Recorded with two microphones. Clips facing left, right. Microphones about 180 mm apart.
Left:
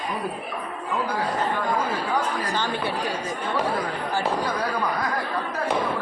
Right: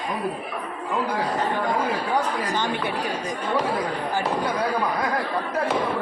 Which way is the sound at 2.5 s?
20° right (ahead or behind).